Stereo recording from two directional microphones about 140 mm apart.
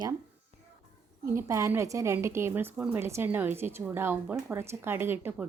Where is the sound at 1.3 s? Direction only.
20° right (ahead or behind).